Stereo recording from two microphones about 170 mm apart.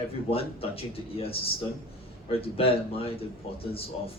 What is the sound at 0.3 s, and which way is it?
Speech, 35° left (ahead or behind).